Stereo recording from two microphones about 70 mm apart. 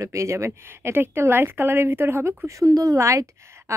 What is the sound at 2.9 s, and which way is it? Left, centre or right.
Speech, right.